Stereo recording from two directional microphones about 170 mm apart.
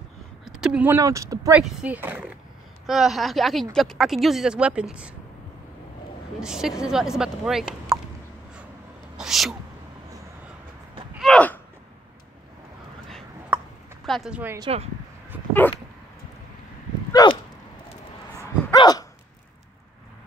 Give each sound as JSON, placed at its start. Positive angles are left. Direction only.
{"t": 0.6, "sound": "speech", "side_deg": -5}
{"t": 0.9, "sound": "speech", "side_deg": -20}
{"t": 1.6, "sound": "speech", "side_deg": -5}
{"t": 6.4, "sound": "speech", "side_deg": -5}
{"t": 9.1, "sound": "a sound", "side_deg": 0}
{"t": 11.1, "sound": "gasp", "side_deg": 5}
{"t": 13.5, "sound": "a sound", "side_deg": -10}
{"t": 14.0, "sound": "speech", "side_deg": 0}
{"t": 14.7, "sound": "speech", "side_deg": -35}
{"t": 15.3, "sound": "dog", "side_deg": -10}
{"t": 17.1, "sound": "dog", "side_deg": 25}
{"t": 18.7, "sound": "dog", "side_deg": 20}